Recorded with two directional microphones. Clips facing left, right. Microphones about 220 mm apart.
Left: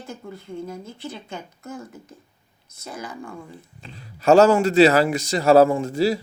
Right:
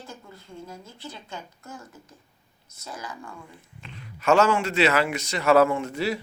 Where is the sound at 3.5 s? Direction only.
35° left (ahead or behind).